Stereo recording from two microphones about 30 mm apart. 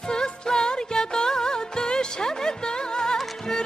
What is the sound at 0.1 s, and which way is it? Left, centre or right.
Music, left.